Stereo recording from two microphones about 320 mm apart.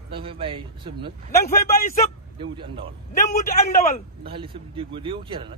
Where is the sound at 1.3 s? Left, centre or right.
Left.